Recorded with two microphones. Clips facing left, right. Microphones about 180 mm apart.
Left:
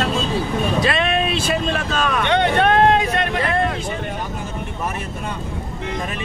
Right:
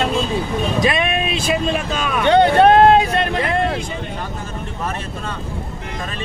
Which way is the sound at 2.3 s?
35° right (ahead or behind).